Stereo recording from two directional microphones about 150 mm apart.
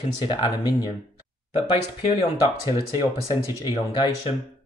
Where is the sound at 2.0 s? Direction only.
35° left (ahead or behind).